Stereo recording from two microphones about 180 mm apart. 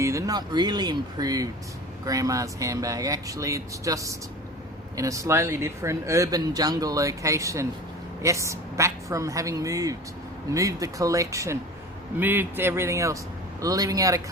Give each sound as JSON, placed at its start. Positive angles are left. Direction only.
{"t": 0.0, "sound": "speech", "side_deg": -15}